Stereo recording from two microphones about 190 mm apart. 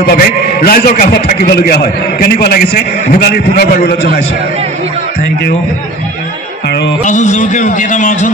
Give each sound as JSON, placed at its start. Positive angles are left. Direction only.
{"t": 0.0, "sound": "a man's voice", "side_deg": 55}
{"t": 7.1, "sound": "a man's voice", "side_deg": 40}